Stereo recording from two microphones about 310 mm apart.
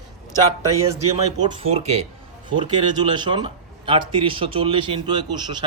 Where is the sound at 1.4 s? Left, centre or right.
Centre.